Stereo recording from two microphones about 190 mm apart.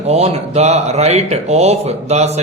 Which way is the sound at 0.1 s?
35° right (ahead or behind).